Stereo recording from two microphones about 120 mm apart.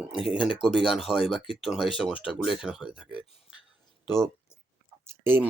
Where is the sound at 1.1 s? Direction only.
50° left (ahead or behind).